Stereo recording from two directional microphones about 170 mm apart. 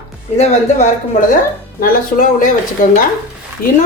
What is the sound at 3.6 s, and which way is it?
Speech, 60° left (ahead or behind).